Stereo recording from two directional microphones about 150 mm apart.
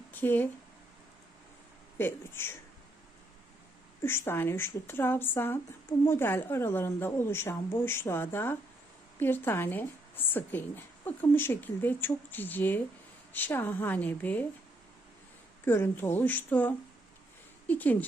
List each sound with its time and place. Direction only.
0.1 s a woman's voice: 15° left (ahead or behind)
2.0 s a woman's voice: 15° left (ahead or behind)
4.0 s a woman's voice: 15° left (ahead or behind)
15.6 s a woman's voice: 15° left (ahead or behind)